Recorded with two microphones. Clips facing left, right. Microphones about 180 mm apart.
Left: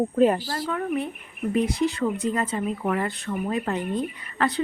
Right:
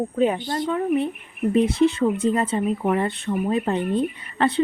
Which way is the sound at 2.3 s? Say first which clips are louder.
Right 4 dB; 30° right (ahead or behind).